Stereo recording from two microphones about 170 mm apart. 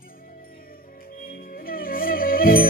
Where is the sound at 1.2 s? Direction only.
60° left (ahead or behind).